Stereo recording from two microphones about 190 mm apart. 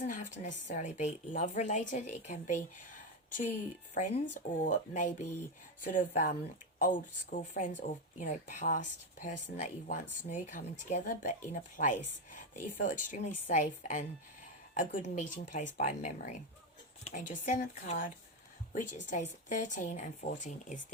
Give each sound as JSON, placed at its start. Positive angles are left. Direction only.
{"t": 0.0, "sound": "speech", "side_deg": 40}
{"t": 3.9, "sound": "a woman's voice", "side_deg": 40}